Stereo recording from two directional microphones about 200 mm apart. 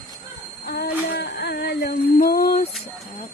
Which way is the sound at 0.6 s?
50° left (ahead or behind).